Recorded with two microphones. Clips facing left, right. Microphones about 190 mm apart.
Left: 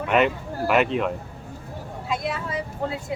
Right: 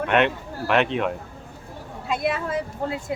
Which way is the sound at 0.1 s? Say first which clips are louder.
Left 2 dB; 5° left (ahead or behind).